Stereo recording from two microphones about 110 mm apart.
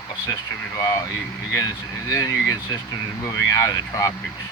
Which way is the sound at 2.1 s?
30° left (ahead or behind).